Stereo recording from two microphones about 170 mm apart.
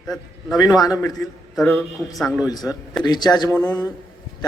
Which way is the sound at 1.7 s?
Centre (ahead or behind).